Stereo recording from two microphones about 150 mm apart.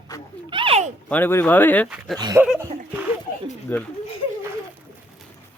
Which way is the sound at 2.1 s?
25° right (ahead or behind).